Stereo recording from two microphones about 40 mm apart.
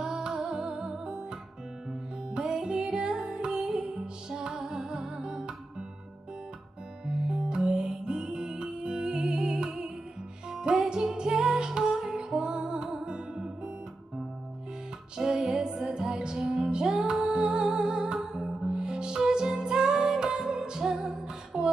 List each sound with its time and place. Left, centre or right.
0.0 s music: centre
7.1 s music: centre
15.1 s music: centre